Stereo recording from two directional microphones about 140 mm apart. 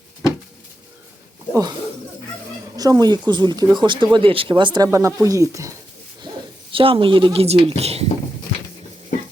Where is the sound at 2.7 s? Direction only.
25° right (ahead or behind).